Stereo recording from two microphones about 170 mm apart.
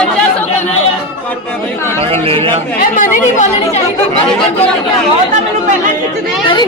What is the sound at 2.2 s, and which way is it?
Speech, 35° right (ahead or behind).